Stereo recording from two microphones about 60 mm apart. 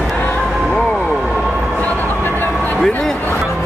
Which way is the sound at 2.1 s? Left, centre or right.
Left.